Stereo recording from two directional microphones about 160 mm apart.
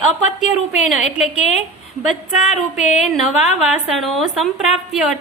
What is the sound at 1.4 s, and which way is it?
Speech, 45° left (ahead or behind).